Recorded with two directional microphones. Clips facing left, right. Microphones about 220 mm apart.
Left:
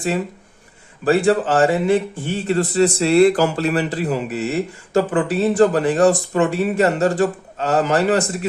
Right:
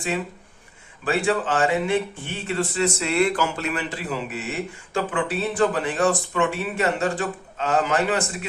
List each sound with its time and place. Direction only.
1.0 s speech: 40° left (ahead or behind)